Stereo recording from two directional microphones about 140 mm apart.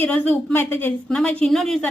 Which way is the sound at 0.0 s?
15° left (ahead or behind).